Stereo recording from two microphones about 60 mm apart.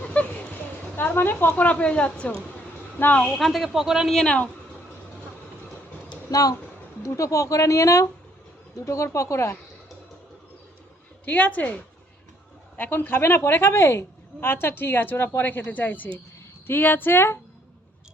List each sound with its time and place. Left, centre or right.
0.0 s a sound: left
0.9 s a woman's voice: left
3.0 s a woman's voice: left
3.3 s speech: centre
4.1 s a woman's voice: centre
6.3 s speech: left
7.0 s speech: left
11.3 s a woman's voice: left